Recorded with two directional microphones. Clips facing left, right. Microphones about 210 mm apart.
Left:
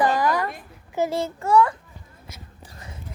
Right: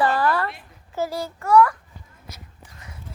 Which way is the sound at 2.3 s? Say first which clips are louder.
Left 3 dB; 35° left (ahead or behind).